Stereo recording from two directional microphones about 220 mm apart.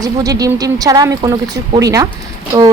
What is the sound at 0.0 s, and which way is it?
Speech, 15° right (ahead or behind).